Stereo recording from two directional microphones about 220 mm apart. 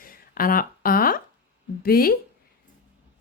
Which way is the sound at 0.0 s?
40° left (ahead or behind).